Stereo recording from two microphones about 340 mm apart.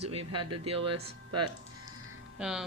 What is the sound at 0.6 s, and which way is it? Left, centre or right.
Speech, centre.